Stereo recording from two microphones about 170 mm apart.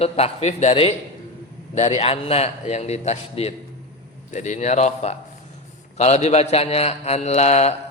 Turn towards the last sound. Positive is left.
turn(degrees=40)  # may be behind; listen again after turning